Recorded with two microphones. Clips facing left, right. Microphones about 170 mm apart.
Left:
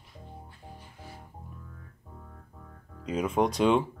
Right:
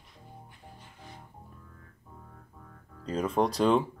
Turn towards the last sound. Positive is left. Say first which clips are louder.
# left 1 dB
turn(degrees=0)  # may be behind; listen again after turning